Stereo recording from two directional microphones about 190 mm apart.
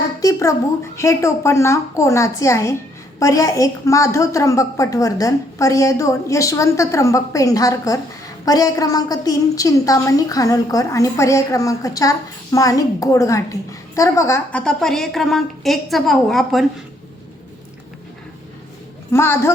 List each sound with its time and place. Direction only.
0.2 s a woman's voice: 15° left (ahead or behind); by 16.6 s centre (ahead or behind)
19.1 s a woman's voice: 15° left (ahead or behind)